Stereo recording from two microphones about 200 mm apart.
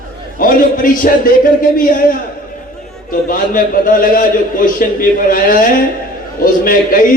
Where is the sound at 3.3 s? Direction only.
45° left (ahead or behind).